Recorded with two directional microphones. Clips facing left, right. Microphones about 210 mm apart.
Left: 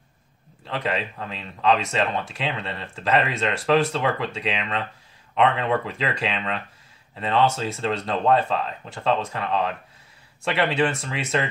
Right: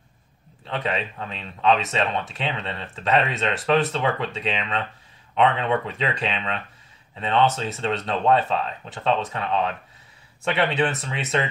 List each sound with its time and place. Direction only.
0.7 s speech: centre (ahead or behind)